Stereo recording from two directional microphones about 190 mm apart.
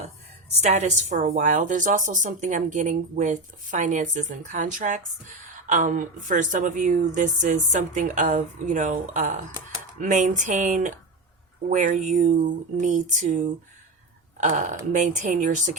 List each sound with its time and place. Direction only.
0.6 s speech: 40° right (ahead or behind)
14.4 s speech: 40° right (ahead or behind)